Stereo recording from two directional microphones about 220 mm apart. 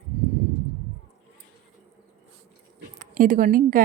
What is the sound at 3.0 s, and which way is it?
Speech, 40° right (ahead or behind).